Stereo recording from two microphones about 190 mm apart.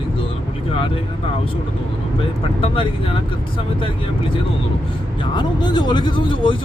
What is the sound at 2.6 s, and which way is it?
Speech, 30° left (ahead or behind).